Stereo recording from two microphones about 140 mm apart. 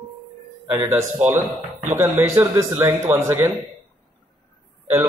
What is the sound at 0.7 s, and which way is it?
Speech, 15° right (ahead or behind).